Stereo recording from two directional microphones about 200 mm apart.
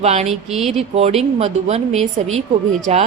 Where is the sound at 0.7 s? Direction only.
30° right (ahead or behind).